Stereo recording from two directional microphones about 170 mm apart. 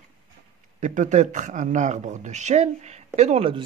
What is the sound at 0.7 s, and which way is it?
Speech, 45° right (ahead or behind).